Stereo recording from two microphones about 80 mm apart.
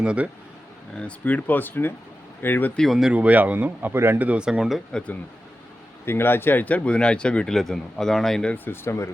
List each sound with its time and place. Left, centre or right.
0.0 s speech: centre
0.9 s speech: centre
2.7 s speech: centre
3.1 s speech: centre
4.3 s speech: centre
4.9 s speech: centre
6.1 s speech: left; by 8.5 s centre
8.5 s speech: left